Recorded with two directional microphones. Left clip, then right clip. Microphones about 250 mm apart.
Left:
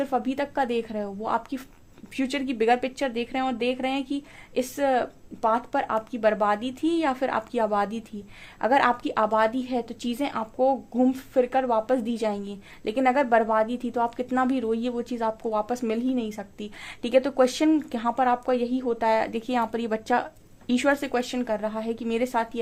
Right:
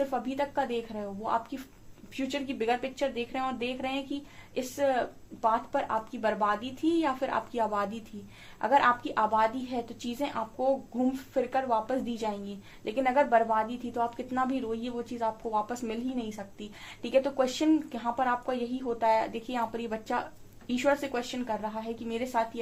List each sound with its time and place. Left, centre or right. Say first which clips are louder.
0.0 s a woman's voice: left 4 dB; left